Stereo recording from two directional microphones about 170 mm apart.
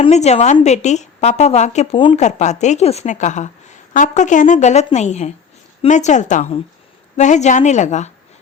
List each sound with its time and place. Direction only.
0.0 s a woman's voice: 40° left (ahead or behind)